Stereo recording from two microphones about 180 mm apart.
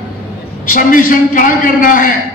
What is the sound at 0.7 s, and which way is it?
A man's voice, 50° left (ahead or behind).